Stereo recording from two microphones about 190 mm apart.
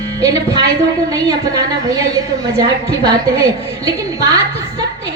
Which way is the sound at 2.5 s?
20° right (ahead or behind).